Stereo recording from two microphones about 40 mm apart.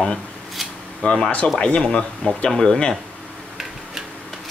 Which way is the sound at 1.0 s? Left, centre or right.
Left.